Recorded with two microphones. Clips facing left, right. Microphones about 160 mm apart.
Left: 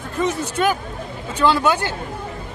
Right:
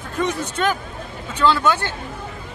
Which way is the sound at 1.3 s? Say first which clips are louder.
Left 1 dB; 15° left (ahead or behind).